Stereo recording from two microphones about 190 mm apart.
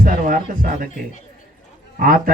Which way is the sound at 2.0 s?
45° right (ahead or behind).